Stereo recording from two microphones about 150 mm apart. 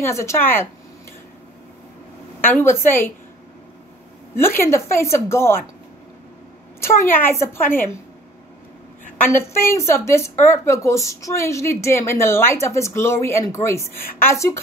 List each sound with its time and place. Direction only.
0.0 s a woman's voice: 20° left (ahead or behind)
2.6 s a woman's voice: 15° left (ahead or behind)
4.4 s a woman's voice: 15° left (ahead or behind)
6.8 s a woman's voice: 15° left (ahead or behind)
9.2 s speech: 15° left (ahead or behind)